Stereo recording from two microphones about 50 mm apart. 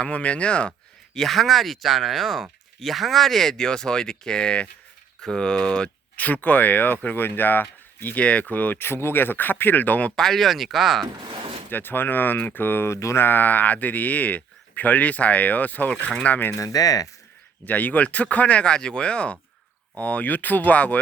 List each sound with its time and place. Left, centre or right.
0.0 s speech: left
1.1 s speech: centre
6.1 s speech: left
8.2 s speech: left
8.8 s speech: left
10.2 s speech: centre
11.7 s speech: left
12.9 s a sound: left
13.1 s speech: left
17.7 s speech: left